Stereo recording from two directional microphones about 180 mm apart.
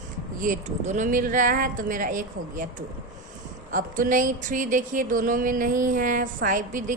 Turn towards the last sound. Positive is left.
turn(degrees=-45)  # may be behind; listen again after turning